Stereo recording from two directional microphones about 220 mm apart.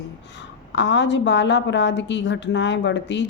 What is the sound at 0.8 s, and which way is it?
A woman's voice, 55° left (ahead or behind).